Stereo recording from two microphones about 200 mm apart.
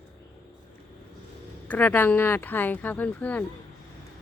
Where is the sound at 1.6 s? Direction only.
10° left (ahead or behind).